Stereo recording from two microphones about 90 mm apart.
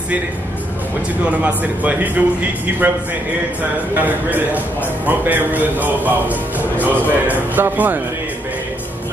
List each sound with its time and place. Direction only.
1.2 s a man's voice: 15° right (ahead or behind)
3.9 s a man's voice: 20° right (ahead or behind)